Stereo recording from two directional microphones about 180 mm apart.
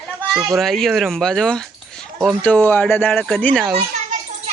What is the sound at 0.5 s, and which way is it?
A child's voice, centre (ahead or behind).